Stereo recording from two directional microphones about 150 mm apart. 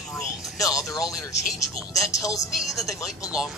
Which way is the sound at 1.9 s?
20° left (ahead or behind).